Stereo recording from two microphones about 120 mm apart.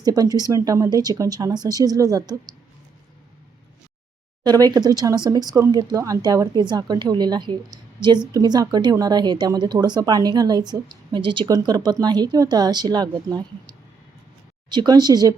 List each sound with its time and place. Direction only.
0.0 s a woman's voice: 30° right (ahead or behind)
4.4 s a woman's voice: 35° right (ahead or behind)
14.7 s a woman's voice: 40° right (ahead or behind)